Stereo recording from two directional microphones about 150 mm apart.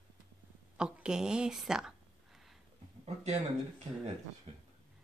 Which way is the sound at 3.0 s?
45° right (ahead or behind).